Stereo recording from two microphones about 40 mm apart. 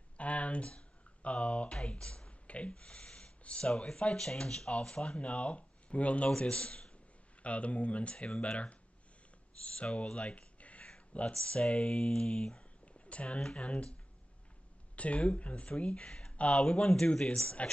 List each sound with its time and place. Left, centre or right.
0.2 s a sound: left
1.9 s speech: left
10.1 s a sound: left
11.1 s speech: left
15.0 s speech: left
16.5 s speech: centre